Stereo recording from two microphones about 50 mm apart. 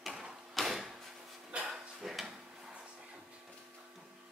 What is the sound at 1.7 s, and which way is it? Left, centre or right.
Drawer open or close, centre.